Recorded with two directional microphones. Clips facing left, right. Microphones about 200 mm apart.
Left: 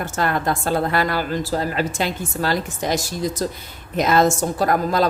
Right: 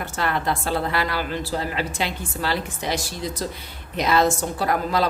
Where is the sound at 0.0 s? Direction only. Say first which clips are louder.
Left 3 dB; 45° left (ahead or behind).